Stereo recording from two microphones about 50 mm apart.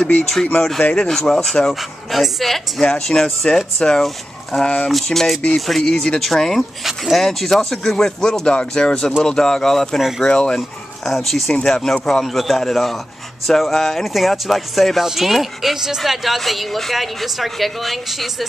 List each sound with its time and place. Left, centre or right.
0.5 s speech: left
0.9 s speech: centre
1.7 s a woman's voice: centre
2.8 s speech: centre
9.9 s a woman's voice: centre
10.2 s speech: centre
11.1 s a woman's voice: centre